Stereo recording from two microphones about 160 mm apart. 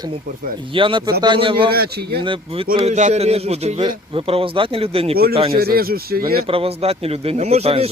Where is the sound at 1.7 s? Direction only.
80° right.